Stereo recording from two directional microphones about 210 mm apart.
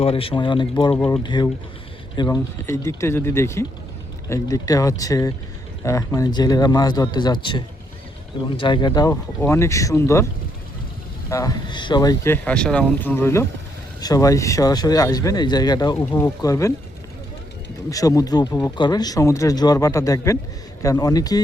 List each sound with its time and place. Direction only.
0.0 s a man's voice: 25° left (ahead or behind)
0.9 s speech: 5° left (ahead or behind)
1.2 s a man's voice: 20° left (ahead or behind)
11.3 s speech: 15° left (ahead or behind)
17.9 s speech: 15° left (ahead or behind)